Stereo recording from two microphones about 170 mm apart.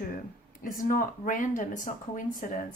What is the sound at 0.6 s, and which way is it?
Speech, 55° left (ahead or behind).